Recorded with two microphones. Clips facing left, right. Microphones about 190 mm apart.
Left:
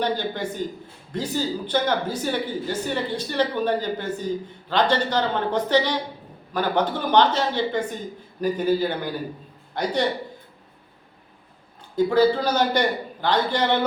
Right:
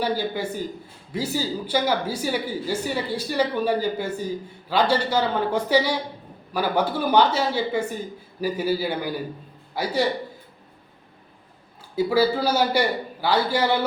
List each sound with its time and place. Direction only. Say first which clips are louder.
0.0 s speech: even; 10° right (ahead or behind)
11.9 s speech: left 2 dB; 5° right (ahead or behind)